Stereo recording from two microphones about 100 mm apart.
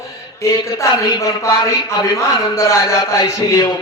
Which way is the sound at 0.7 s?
40° left (ahead or behind).